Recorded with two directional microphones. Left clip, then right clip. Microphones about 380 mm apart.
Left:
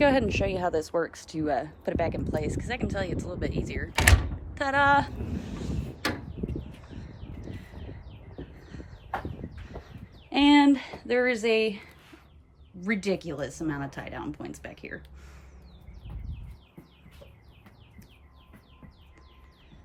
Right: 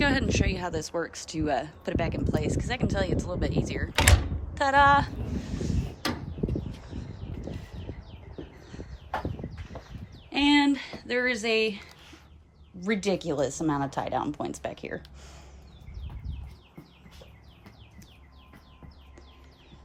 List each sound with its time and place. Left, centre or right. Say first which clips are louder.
0.0 s speech: left 3 dB; centre
4.5 s door: right 2 dB; centre
6.9 s a sound: right 4 dB; left
10.2 s speech: left 3 dB; centre